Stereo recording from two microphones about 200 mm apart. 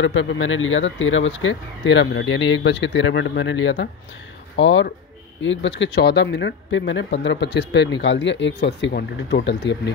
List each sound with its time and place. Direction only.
0.0 s speech: 75° left (ahead or behind)